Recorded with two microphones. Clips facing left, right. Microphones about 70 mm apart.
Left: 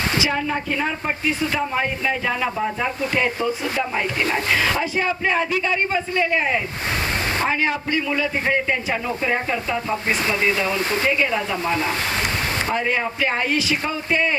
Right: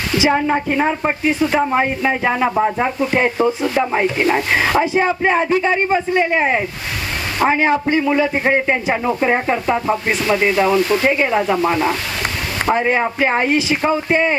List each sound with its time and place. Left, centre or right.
0.2 s a woman's voice: right
10.8 s speech: left
11.0 s a woman's voice: right